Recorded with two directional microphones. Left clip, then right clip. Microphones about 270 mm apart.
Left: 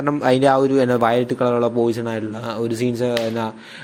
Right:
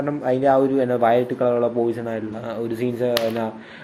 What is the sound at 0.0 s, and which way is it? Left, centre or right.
Speech, left.